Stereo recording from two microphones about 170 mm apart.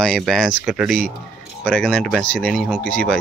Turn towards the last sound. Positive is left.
turn(degrees=5)  # may be behind; listen again after turning